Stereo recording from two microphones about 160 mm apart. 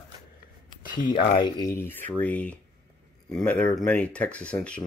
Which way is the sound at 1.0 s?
30° left (ahead or behind).